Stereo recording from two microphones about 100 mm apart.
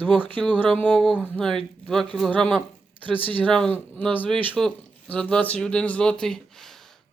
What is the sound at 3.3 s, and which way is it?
Speech, 15° left (ahead or behind).